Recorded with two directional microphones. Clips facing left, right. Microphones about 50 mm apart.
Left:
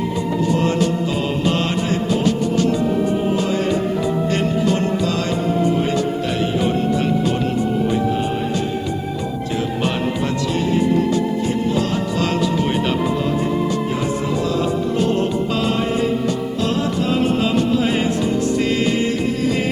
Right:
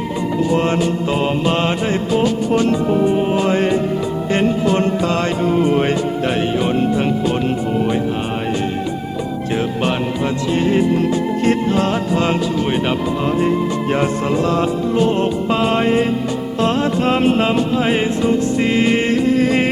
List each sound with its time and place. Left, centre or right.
0.5 s music: right
3.4 s music: right
4.7 s music: right
10.5 s music: right
11.8 s music: right
13.9 s music: right
19.0 s music: right